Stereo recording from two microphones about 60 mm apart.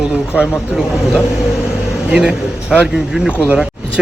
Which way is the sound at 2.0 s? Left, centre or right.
Centre.